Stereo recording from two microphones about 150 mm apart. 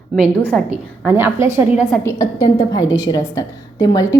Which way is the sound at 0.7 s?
15° right (ahead or behind).